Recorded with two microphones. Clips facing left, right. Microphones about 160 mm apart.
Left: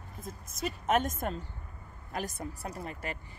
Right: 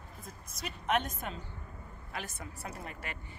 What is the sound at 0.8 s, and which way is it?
A woman's voice, 45° left (ahead or behind).